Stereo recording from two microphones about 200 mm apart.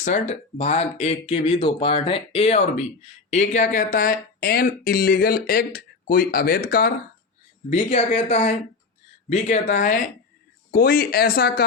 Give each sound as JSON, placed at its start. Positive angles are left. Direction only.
{"t": 0.0, "sound": "speech", "side_deg": 35}
{"t": 7.7, "sound": "speech", "side_deg": 35}